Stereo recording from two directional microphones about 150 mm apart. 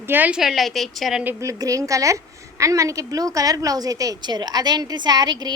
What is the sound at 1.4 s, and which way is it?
A woman's voice, 20° right (ahead or behind).